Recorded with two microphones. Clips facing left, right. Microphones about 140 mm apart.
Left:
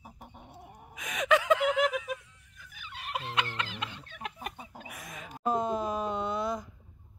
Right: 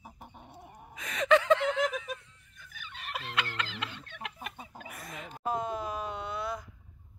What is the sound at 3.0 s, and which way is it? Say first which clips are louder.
Fowl: left 3 dB; 15° left (ahead or behind).